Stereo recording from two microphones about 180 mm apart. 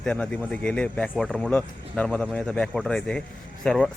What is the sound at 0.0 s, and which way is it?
Speech, 5° left (ahead or behind).